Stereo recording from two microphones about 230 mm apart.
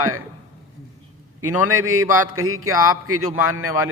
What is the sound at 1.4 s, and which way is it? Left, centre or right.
Speech, centre.